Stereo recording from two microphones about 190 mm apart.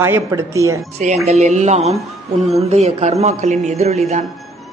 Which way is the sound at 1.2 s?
35° right (ahead or behind).